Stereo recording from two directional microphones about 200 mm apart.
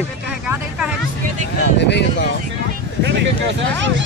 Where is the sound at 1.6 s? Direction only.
60° left (ahead or behind).